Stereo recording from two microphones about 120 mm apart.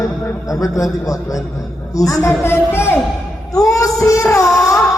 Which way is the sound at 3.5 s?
30° left (ahead or behind).